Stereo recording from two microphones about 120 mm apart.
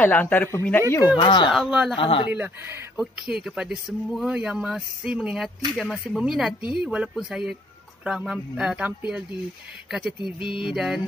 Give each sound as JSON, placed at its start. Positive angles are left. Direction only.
{"t": 0.0, "sound": "speech", "side_deg": 15}
{"t": 0.9, "sound": "speech", "side_deg": 35}
{"t": 1.5, "sound": "speech", "side_deg": -5}
{"t": 2.0, "sound": "speech", "side_deg": 50}
{"t": 2.3, "sound": "speech", "side_deg": -10}